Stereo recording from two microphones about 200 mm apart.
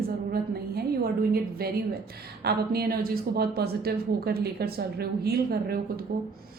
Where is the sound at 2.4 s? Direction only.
50° right (ahead or behind).